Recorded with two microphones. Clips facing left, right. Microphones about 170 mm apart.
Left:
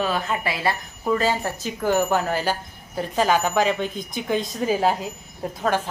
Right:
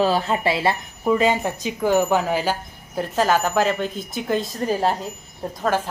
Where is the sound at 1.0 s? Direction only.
10° right (ahead or behind).